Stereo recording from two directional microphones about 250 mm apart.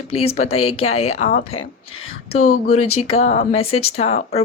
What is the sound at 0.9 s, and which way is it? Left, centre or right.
Speech, left.